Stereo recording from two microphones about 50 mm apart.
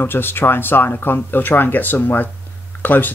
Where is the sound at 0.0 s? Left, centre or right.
Left.